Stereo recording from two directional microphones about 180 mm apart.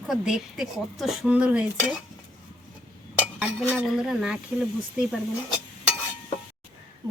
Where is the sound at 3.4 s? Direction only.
Centre (ahead or behind).